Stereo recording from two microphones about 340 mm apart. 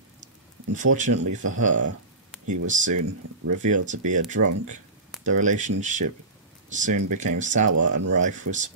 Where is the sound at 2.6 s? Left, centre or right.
Right.